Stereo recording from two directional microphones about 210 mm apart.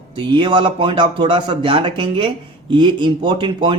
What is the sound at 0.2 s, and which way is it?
Speech, 20° right (ahead or behind).